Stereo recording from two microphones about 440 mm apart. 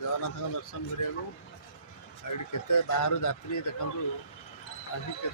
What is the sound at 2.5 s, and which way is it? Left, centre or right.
A man's voice, left.